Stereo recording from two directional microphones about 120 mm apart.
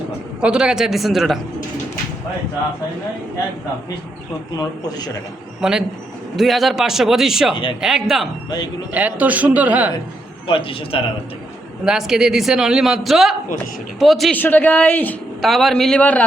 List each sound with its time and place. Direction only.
0.4 s a man's voice: 5° right (ahead or behind)
4.5 s speech: 35° left (ahead or behind)
6.3 s a man's voice: centre (ahead or behind)
8.4 s speech: 35° left (ahead or behind)
8.9 s a man's voice: 10° right (ahead or behind)
10.4 s a man's voice: 45° left (ahead or behind)
11.9 s a man's voice: 5° right (ahead or behind)
14.3 s speech: 15° left (ahead or behind)
15.4 s a man's voice: centre (ahead or behind)